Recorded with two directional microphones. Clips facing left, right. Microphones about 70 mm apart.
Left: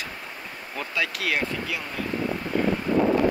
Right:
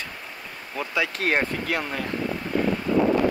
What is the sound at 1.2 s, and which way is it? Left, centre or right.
Speech, right.